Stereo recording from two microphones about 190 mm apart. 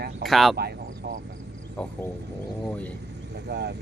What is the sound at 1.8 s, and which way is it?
Speech, 5° left (ahead or behind).